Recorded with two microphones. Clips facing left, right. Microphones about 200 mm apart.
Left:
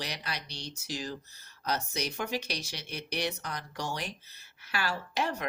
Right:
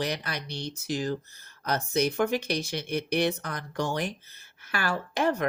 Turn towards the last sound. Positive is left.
turn(degrees=-50)  # may be behind; listen again after turning